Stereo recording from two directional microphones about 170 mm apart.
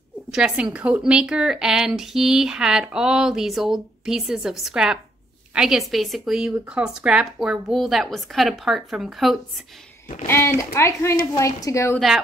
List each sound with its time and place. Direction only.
0.3 s a woman's voice: 5° right (ahead or behind)
10.2 s a woman's voice: 15° left (ahead or behind)